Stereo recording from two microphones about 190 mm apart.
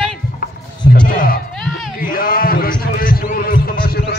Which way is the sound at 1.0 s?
50° left (ahead or behind).